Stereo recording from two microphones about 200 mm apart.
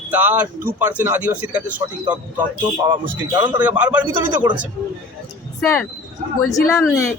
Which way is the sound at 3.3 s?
20° right (ahead or behind).